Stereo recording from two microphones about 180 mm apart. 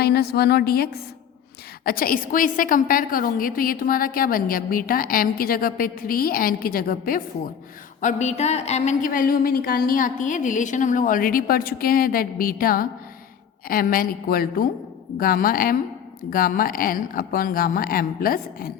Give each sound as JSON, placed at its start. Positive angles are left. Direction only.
{"t": 0.0, "sound": "a woman's voice", "side_deg": 60}
{"t": 8.0, "sound": "a woman's voice", "side_deg": 40}